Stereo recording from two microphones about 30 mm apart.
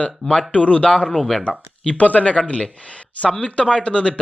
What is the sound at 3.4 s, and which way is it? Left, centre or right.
Speech, left.